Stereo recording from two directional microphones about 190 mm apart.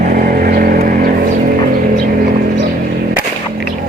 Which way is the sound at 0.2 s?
50° right (ahead or behind).